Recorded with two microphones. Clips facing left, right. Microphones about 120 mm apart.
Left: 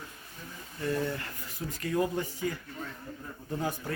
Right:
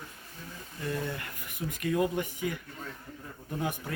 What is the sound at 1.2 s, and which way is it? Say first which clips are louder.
A man's voice: right 1 dB; 15° right (ahead or behind).